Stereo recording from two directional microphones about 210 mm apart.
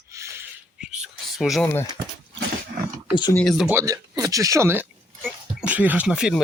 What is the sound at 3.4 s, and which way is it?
Speech, centre (ahead or behind).